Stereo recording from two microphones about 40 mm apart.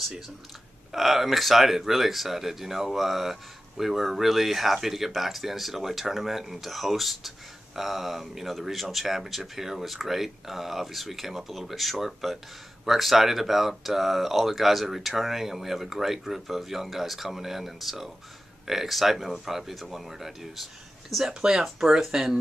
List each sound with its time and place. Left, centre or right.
0.9 s speech: centre
21.3 s speech: centre
21.6 s speech: centre